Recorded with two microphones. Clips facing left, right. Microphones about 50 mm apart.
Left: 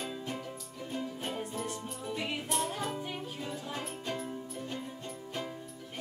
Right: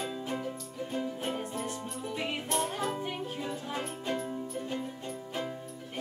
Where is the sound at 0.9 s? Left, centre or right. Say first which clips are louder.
Right 3 dB; centre.